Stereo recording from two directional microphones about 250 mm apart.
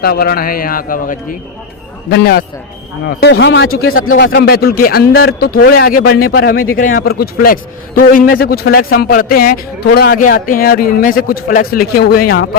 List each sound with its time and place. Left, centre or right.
0.0 s a man's voice: left
4.2 s a man's voice: left
6.1 s speech: left
6.3 s a man's voice: left